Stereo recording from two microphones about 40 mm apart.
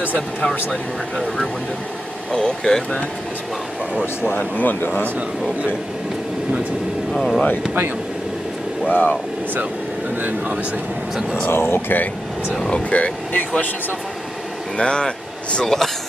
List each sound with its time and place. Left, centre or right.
1.1 s speech: centre
4.3 s speech: left
7.1 s speech: centre
8.8 s speech: left
11.5 s speech: left
12.6 s speech: left
14.8 s speech: left
15.6 s speech: centre